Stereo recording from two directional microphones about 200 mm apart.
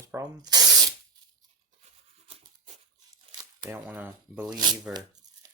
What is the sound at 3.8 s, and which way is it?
Speech, 10° right (ahead or behind).